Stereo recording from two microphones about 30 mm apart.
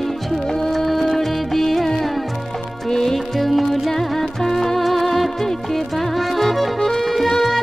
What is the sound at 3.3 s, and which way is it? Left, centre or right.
Music, centre.